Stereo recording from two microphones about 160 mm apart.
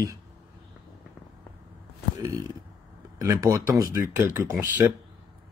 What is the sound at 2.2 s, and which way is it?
Speech, 20° right (ahead or behind).